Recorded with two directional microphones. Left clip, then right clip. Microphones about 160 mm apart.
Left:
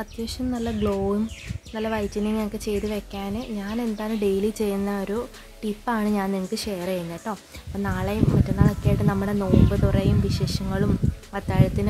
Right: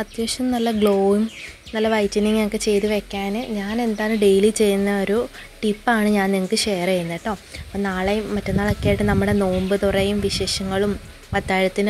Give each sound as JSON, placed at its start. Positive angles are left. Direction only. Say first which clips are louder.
{"t": 0.0, "sound": "speech", "louder": "right 7 dB", "side_deg": -5}
{"t": 0.5, "sound": "speech", "louder": "right 8 dB", "side_deg": -15}